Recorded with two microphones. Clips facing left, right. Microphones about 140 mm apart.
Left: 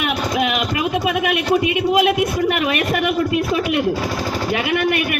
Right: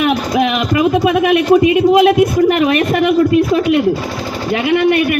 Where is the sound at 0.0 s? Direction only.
35° right (ahead or behind).